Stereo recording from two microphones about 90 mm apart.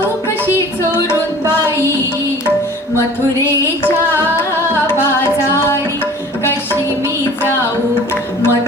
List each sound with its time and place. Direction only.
4.9 s music: 25° left (ahead or behind)
8.1 s music: 20° left (ahead or behind)